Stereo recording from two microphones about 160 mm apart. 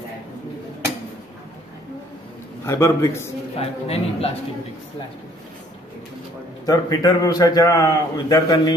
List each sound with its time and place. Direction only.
2.6 s a man's voice: 15° left (ahead or behind)
3.5 s a man's voice: 40° left (ahead or behind)
6.6 s a man's voice: 25° left (ahead or behind)